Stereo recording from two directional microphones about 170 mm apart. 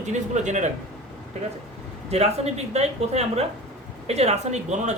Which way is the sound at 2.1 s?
40° right (ahead or behind).